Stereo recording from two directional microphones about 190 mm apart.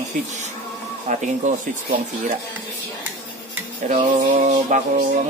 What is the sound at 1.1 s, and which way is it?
Speech, 40° right (ahead or behind).